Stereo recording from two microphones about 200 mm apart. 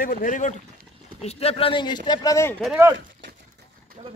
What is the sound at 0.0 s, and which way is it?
Speech, 45° left (ahead or behind).